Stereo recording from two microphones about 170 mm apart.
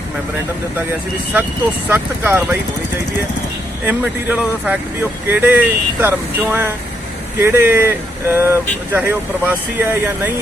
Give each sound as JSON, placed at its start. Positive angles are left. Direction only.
{"t": 1.9, "sound": "speech", "side_deg": -10}
{"t": 3.8, "sound": "speech", "side_deg": -10}